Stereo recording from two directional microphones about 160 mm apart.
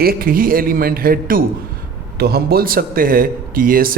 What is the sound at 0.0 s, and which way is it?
Speech, 70° right (ahead or behind).